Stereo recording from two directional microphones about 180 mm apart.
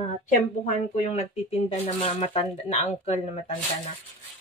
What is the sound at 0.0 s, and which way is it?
Speech, 40° left (ahead or behind).